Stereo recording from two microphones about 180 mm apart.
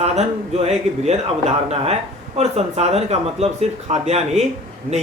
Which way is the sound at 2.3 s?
35° right (ahead or behind).